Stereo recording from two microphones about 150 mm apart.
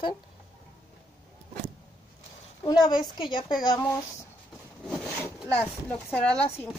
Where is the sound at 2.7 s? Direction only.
25° left (ahead or behind).